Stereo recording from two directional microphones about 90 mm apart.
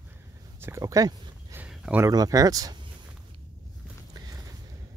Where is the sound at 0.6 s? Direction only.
35° right (ahead or behind).